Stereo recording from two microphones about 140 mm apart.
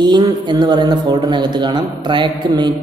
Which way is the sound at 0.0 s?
30° right (ahead or behind).